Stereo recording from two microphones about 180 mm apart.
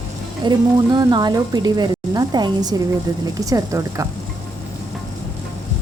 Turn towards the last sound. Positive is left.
turn(degrees=-20)  # may be behind; listen again after turning